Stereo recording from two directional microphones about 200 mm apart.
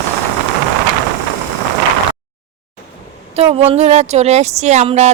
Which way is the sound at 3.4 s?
30° right (ahead or behind).